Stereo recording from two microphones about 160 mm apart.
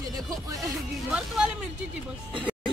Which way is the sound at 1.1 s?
5° right (ahead or behind).